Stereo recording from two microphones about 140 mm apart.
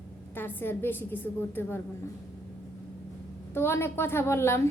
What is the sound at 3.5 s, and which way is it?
A woman's voice, 15° left (ahead or behind).